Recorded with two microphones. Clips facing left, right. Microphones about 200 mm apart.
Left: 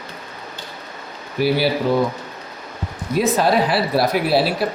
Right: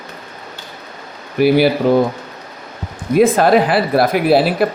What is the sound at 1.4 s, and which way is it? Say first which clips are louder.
Speech: right 6 dB; 50° right (ahead or behind).